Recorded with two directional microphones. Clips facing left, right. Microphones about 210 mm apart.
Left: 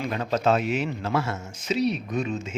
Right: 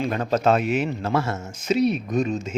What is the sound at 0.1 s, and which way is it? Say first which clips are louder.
A man's voice: right 1 dB; 45° right (ahead or behind).